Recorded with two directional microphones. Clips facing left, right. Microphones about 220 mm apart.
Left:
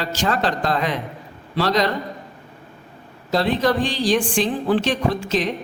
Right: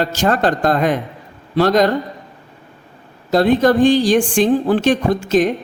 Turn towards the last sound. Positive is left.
turn(degrees=-45)  # may be behind; listen again after turning